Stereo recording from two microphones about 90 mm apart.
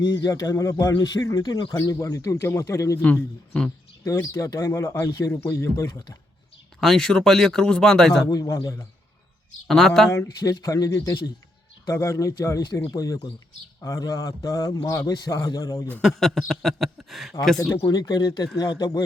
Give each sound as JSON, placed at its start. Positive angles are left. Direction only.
{"t": 0.1, "sound": "speech", "side_deg": 40}
{"t": 1.7, "sound": "speech", "side_deg": 35}
{"t": 3.0, "sound": "a man's voice", "side_deg": 15}
{"t": 4.0, "sound": "speech", "side_deg": 35}
{"t": 6.7, "sound": "a man's voice", "side_deg": 5}
{"t": 8.3, "sound": "a man's voice", "side_deg": 45}
{"t": 9.6, "sound": "a man's voice", "side_deg": 5}
{"t": 10.1, "sound": "a man's voice", "side_deg": 35}
{"t": 16.0, "sound": "a man's voice", "side_deg": 5}
{"t": 17.8, "sound": "a man's voice", "side_deg": 45}